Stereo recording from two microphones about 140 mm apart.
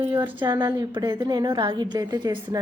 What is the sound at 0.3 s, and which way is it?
A woman's voice, 35° right (ahead or behind).